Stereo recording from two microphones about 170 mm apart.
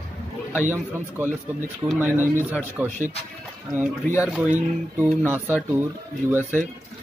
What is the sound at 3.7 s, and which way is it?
Speech, 50° right (ahead or behind).